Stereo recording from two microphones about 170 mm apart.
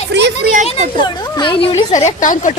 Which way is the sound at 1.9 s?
45° left (ahead or behind).